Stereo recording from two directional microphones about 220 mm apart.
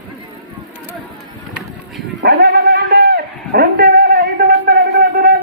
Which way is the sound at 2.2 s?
45° right (ahead or behind).